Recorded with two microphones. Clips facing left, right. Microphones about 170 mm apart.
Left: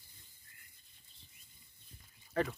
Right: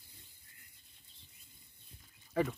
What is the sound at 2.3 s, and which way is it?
Speech, 5° right (ahead or behind).